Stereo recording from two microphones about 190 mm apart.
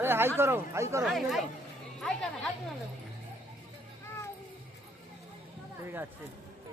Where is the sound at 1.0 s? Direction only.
Centre (ahead or behind).